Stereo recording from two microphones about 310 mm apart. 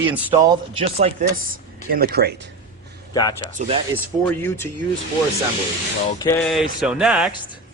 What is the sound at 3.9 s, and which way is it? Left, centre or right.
Speech, centre.